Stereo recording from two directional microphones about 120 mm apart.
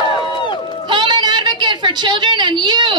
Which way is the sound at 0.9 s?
40° right (ahead or behind).